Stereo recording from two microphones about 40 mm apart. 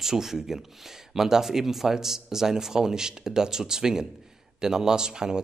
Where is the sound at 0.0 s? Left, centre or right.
Centre.